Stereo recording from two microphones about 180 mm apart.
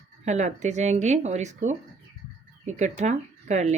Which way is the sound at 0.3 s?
40° right (ahead or behind).